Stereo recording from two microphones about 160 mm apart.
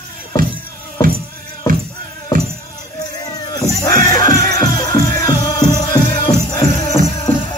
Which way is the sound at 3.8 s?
25° left (ahead or behind).